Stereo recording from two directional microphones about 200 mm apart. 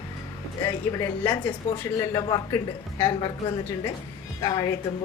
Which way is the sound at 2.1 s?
15° left (ahead or behind).